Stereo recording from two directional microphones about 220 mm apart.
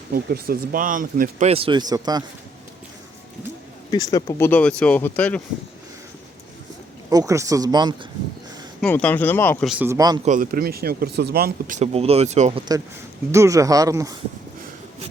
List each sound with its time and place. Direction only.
0.1 s speech: 45° right (ahead or behind); by 2.2 s 20° right (ahead or behind)
3.9 s speech: 15° left (ahead or behind)
7.1 s speech: 15° right (ahead or behind)
8.8 s speech: 5° left (ahead or behind)
9.6 s speech: 10° right (ahead or behind)
10.2 s speech: 35° right (ahead or behind)
11.8 s speech: 25° right (ahead or behind)
13.3 s speech: 15° right (ahead or behind)